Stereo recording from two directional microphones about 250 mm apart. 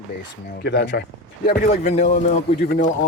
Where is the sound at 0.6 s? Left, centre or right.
Left.